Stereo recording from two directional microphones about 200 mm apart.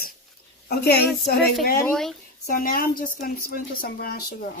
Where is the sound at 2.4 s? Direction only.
45° left (ahead or behind).